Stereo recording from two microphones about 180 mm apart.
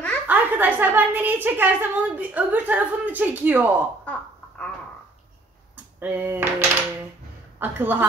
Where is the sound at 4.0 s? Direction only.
10° left (ahead or behind).